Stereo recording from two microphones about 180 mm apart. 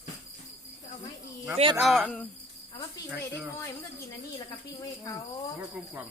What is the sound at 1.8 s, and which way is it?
Speech, centre (ahead or behind).